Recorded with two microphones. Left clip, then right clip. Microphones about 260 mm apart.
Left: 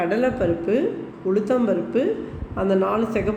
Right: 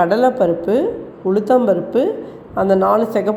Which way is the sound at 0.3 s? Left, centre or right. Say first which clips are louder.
Right 6 dB; right.